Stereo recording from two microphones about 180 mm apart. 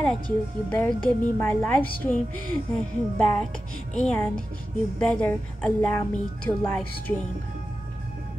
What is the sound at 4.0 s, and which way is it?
A woman's voice, 5° left (ahead or behind).